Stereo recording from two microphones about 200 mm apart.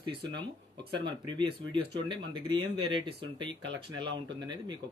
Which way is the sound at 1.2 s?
25° right (ahead or behind).